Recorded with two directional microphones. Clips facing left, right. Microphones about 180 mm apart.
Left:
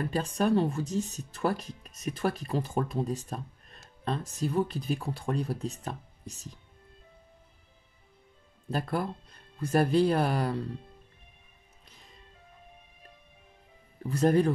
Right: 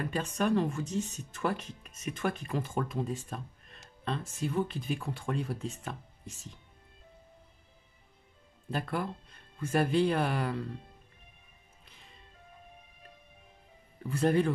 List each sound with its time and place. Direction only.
0.1 s speech: 35° left (ahead or behind)
8.6 s speech: 40° left (ahead or behind)
11.8 s music: 40° left (ahead or behind)
14.0 s speech: 40° left (ahead or behind)